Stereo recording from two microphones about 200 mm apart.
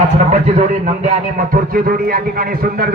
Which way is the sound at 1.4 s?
45° right (ahead or behind).